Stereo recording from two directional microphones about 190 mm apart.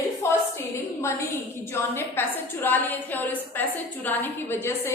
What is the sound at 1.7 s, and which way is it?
A woman's voice, 10° left (ahead or behind).